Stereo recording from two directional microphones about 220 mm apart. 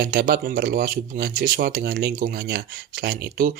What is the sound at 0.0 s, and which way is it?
Speech, 45° right (ahead or behind).